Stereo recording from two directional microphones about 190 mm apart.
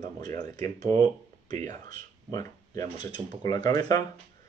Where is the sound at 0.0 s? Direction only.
20° left (ahead or behind).